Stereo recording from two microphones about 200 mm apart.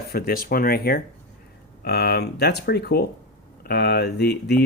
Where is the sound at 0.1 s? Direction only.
50° left (ahead or behind).